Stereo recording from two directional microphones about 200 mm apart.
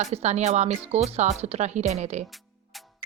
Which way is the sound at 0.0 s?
35° right (ahead or behind).